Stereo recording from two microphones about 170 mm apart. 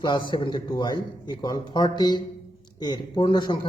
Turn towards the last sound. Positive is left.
turn(degrees=30)  # may be behind; listen again after turning